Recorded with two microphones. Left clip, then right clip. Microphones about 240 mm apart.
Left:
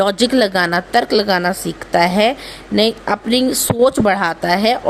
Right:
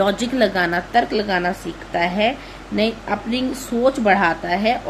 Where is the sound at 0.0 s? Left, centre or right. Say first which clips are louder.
Left 4 dB; left.